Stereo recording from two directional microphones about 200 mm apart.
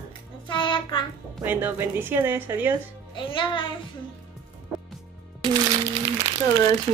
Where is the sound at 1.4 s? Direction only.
10° right (ahead or behind).